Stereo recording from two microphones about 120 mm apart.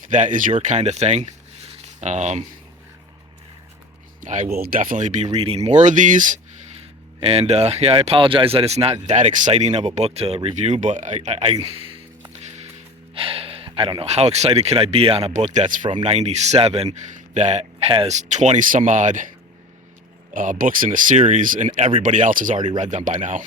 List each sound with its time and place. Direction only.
0.1 s speech: 90° right
0.6 s speech: 75° right (ahead or behind)
4.2 s speech: 90° right
7.2 s speech: 55° right (ahead or behind)
11.6 s a sound: 50° right (ahead or behind)
13.1 s speech: 50° right (ahead or behind)
15.3 s speech: 80° right
16.0 s speech: 65° right (ahead or behind)
17.3 s speech: 70° right (ahead or behind); by 19.3 s 90° right
20.3 s speech: 90° right